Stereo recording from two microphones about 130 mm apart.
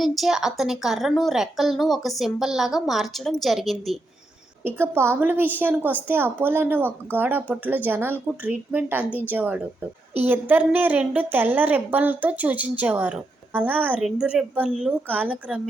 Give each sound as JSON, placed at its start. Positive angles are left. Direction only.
{"t": 0.0, "sound": "a woman's voice", "side_deg": 0}
{"t": 4.6, "sound": "a woman's voice", "side_deg": -15}